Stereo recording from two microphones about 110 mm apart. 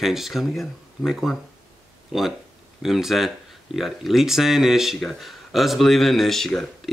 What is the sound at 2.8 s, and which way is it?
Speech, centre (ahead or behind).